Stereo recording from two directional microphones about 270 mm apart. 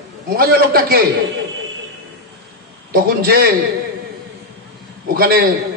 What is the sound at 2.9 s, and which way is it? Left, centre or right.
Speech, right.